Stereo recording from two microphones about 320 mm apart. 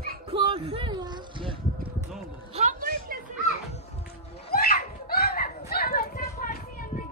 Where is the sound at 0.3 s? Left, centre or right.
Centre.